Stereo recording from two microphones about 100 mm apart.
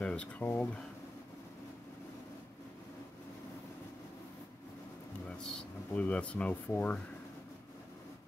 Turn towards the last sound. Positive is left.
turn(degrees=15)  # may be behind; listen again after turning